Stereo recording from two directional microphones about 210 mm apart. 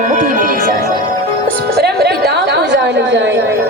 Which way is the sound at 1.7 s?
50° right (ahead or behind).